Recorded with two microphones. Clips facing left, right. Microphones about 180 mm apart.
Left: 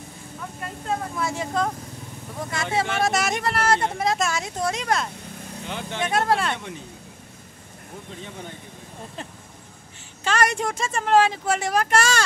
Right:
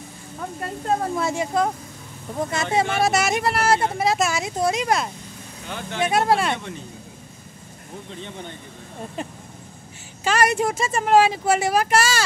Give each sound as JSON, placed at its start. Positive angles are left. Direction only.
{"t": 0.4, "sound": "speech", "side_deg": -40}
{"t": 1.3, "sound": "speech", "side_deg": -10}
{"t": 5.7, "sound": "speech", "side_deg": 20}
{"t": 5.9, "sound": "speech", "side_deg": -10}
{"t": 10.2, "sound": "speech", "side_deg": -10}